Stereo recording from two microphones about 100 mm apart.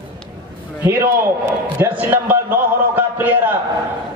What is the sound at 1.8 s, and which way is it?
A man's voice, 20° right (ahead or behind).